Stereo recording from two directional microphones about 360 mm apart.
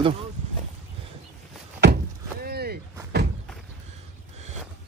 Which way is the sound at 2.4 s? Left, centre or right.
Right.